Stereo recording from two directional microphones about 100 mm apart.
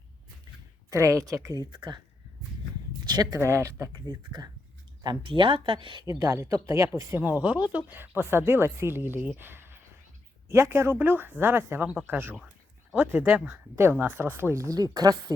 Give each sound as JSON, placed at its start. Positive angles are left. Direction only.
{"t": 0.9, "sound": "speech", "side_deg": -30}
{"t": 1.7, "sound": "speech", "side_deg": -50}
{"t": 3.1, "sound": "speech", "side_deg": -40}
{"t": 3.3, "sound": "speech", "side_deg": -30}
{"t": 4.1, "sound": "speech", "side_deg": -40}
{"t": 5.0, "sound": "speech", "side_deg": -55}
{"t": 6.1, "sound": "speech", "side_deg": -30}
{"t": 7.2, "sound": "speech", "side_deg": -15}
{"t": 14.5, "sound": "speech", "side_deg": -35}